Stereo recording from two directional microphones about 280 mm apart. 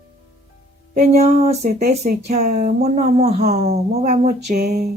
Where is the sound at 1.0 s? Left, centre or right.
Right.